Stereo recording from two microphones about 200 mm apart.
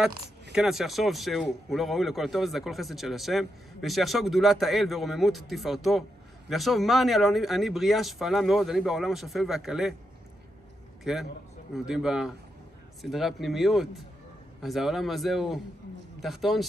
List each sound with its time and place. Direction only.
0.0 s speech: 5° right (ahead or behind)
11.1 s speech: centre (ahead or behind)